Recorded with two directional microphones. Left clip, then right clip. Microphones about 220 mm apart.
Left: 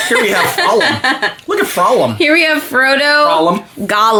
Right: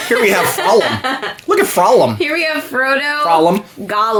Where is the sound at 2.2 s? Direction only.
45° left (ahead or behind).